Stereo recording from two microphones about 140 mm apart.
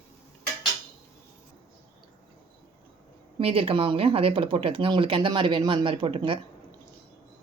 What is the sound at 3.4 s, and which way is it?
Speech, 40° right (ahead or behind).